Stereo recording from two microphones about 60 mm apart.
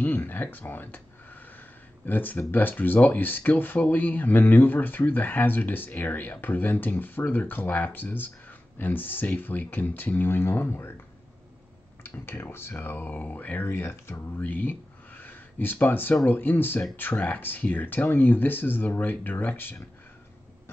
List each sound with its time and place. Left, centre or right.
0.0 s speech: left
12.0 s speech: left
13.1 s speech: left
14.4 s a sound: left
16.3 s speech: left